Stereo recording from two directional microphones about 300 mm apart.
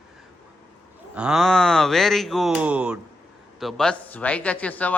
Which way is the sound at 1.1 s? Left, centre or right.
Centre.